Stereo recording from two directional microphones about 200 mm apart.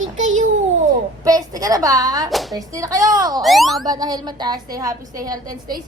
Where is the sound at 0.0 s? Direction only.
80° right.